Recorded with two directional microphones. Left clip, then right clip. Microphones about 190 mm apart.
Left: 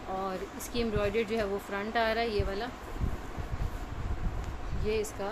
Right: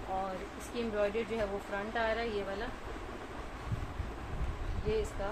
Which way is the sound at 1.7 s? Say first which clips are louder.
Left 5 dB; 65° left (ahead or behind).